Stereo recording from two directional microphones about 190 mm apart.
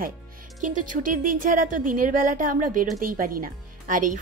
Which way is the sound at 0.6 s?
45° right (ahead or behind).